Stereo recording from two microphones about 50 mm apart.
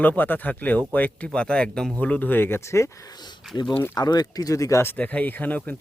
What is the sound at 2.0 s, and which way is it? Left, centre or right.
Speech, left.